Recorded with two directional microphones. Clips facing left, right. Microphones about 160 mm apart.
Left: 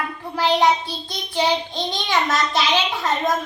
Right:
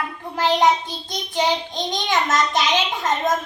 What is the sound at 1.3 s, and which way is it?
Child singing, 20° right (ahead or behind).